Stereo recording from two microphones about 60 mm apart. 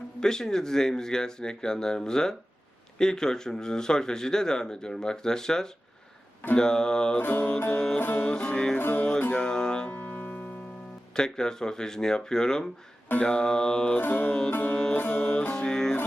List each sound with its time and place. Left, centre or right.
0.2 s speech: centre
7.2 s music: left
8.2 s speech: centre
8.8 s music: left
9.3 s music: centre
9.9 s piano: left
11.1 s speech: centre
14.0 s music: left
15.2 s music: centre